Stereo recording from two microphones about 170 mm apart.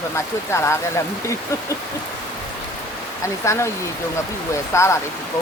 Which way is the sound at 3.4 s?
15° left (ahead or behind).